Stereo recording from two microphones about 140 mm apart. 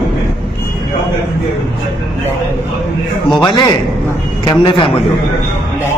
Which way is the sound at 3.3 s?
30° left (ahead or behind).